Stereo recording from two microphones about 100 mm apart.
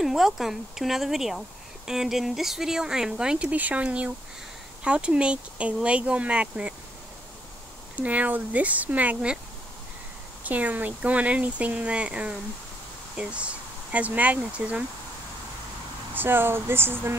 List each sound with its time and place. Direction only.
0.0 s speech: 5° right (ahead or behind)
8.0 s speech: 15° right (ahead or behind)
10.4 s speech: 15° right (ahead or behind)
16.2 s speech: 20° right (ahead or behind)